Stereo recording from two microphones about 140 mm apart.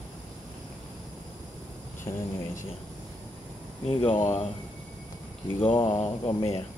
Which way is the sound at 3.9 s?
40° left (ahead or behind).